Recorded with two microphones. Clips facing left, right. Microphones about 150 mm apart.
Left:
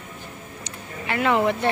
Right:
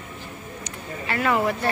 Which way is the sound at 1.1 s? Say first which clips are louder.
Left 2 dB; 20° left (ahead or behind).